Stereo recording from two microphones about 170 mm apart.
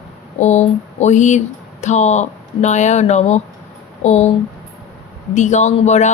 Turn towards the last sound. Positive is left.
turn(degrees=40)  # may be behind; listen again after turning